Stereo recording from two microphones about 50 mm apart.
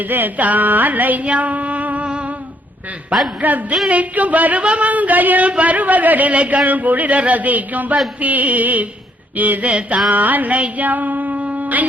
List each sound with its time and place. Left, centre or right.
0.0 s speech: right
3.4 s speech: right
10.1 s music: right